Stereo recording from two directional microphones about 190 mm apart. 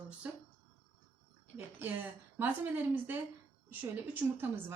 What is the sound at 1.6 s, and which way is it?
Speech, 10° right (ahead or behind).